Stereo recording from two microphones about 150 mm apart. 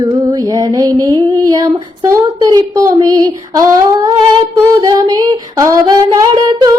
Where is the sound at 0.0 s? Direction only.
25° right (ahead or behind).